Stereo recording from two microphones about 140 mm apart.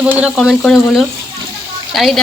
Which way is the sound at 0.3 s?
Centre (ahead or behind).